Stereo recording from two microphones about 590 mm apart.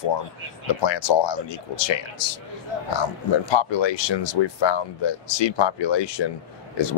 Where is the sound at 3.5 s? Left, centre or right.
Left.